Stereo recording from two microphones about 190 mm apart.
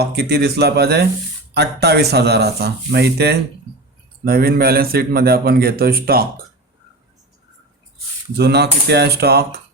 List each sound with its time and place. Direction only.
0.0 s a man's voice: 60° right (ahead or behind)
8.4 s speech: 60° right (ahead or behind)